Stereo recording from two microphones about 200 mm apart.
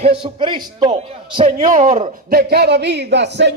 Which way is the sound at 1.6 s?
40° right (ahead or behind).